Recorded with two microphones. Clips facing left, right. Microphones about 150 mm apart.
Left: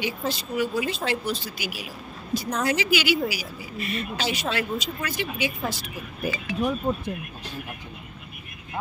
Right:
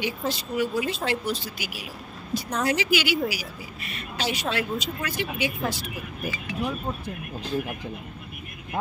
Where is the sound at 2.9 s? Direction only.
90° left.